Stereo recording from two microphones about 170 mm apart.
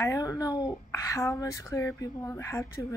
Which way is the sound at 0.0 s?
20° left (ahead or behind).